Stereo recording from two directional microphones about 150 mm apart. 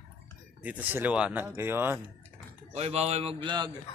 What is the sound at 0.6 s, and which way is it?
Speech, 10° right (ahead or behind).